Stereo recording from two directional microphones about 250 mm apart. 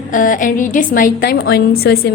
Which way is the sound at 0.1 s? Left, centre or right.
Left.